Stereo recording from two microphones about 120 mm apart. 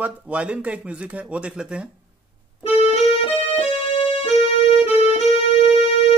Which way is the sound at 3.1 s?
55° left (ahead or behind).